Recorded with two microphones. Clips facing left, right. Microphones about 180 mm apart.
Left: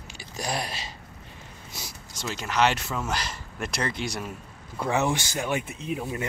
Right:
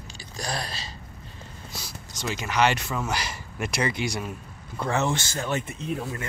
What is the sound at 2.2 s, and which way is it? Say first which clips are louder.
Speech: right 1 dB; centre (ahead or behind).